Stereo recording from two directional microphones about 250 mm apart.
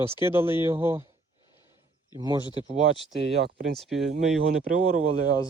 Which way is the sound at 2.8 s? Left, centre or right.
Left.